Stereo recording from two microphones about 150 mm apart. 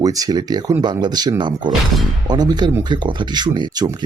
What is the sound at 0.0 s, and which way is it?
Speech, 25° right (ahead or behind).